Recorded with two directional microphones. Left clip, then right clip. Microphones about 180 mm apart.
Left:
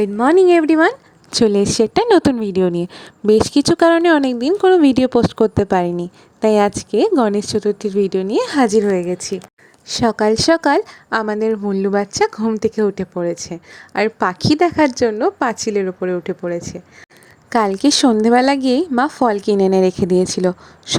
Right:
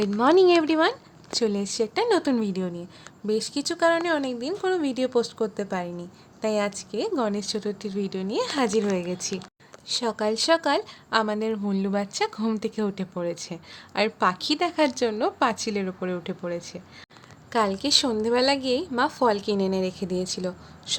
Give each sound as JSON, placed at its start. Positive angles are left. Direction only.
{"t": 0.0, "sound": "speech", "side_deg": 25}
{"t": 0.8, "sound": "a woman's voice", "side_deg": 45}
{"t": 9.8, "sound": "speech", "side_deg": 45}
{"t": 17.5, "sound": "a woman's voice", "side_deg": 50}